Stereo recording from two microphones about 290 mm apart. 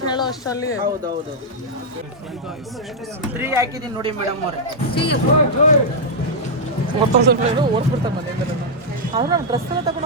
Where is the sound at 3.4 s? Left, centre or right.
Centre.